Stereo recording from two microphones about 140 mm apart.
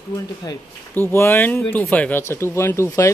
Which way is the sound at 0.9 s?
20° left (ahead or behind).